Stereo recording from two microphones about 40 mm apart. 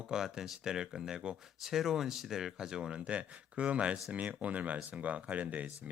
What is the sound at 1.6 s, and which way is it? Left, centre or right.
Speech, centre.